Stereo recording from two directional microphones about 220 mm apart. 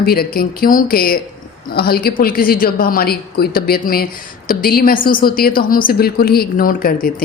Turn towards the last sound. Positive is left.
turn(degrees=40)  # may be behind; listen again after turning